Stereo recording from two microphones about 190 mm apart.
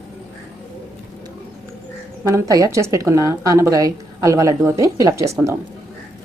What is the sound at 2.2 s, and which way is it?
A woman's voice, 15° right (ahead or behind).